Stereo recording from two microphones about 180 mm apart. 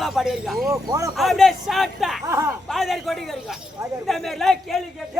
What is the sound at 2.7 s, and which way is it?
A man's voice, centre (ahead or behind).